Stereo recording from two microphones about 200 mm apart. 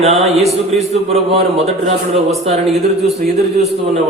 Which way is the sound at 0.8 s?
30° right (ahead or behind).